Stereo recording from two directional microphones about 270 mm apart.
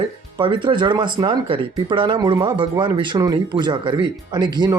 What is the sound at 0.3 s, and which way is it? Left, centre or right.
Speech, centre.